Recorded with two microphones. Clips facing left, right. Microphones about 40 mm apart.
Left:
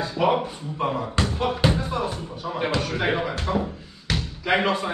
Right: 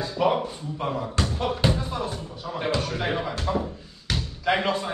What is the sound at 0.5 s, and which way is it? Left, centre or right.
Speech, left.